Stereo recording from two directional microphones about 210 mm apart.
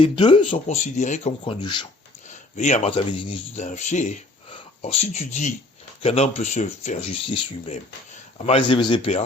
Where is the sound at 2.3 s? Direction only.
35° left (ahead or behind).